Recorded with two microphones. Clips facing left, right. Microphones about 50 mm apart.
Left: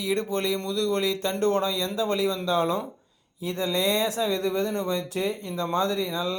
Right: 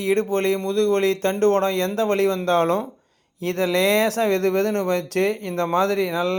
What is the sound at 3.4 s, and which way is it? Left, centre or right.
Speech, right.